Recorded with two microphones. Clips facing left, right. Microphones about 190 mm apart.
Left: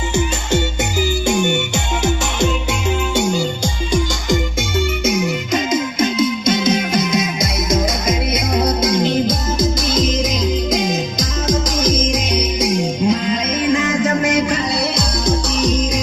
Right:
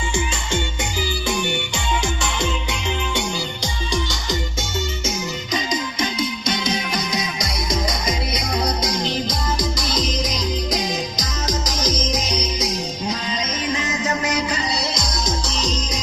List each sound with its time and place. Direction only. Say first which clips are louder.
1.3 s music: left 7 dB; 45° left (ahead or behind)
3.2 s music: left 8 dB; 45° left (ahead or behind)
5.0 s music: left 8 dB; 55° left (ahead or behind)